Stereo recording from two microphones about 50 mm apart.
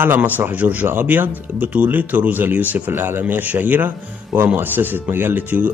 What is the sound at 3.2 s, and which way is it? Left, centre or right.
A man's voice, right.